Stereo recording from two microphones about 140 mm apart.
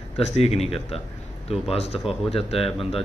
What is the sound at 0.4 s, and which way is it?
Speech, 45° left (ahead or behind).